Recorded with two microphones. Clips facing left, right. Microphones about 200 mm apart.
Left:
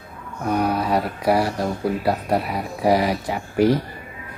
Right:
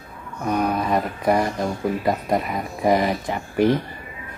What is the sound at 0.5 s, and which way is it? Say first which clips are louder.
Speech: left 1 dB; 10° left (ahead or behind).